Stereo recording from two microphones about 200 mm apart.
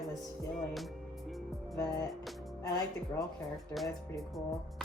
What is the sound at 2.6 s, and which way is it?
Speech, 15° left (ahead or behind).